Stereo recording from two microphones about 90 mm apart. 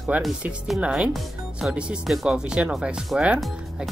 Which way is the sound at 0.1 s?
15° right (ahead or behind).